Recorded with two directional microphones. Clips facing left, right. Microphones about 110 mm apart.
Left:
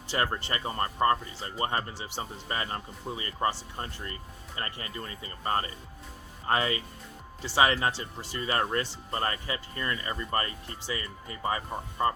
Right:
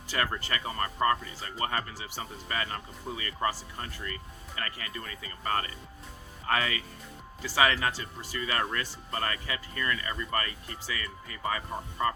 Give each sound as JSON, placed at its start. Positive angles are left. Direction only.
{"t": 0.1, "sound": "speech", "side_deg": 25}